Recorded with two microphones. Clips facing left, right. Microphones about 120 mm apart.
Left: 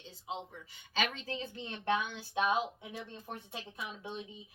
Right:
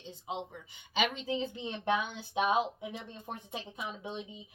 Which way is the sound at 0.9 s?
15° right (ahead or behind).